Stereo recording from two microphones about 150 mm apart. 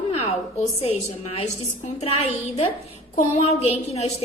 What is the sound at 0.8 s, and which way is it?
A woman's voice, 45° left (ahead or behind).